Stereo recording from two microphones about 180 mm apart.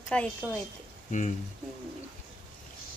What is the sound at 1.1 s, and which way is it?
Speech, 45° left (ahead or behind).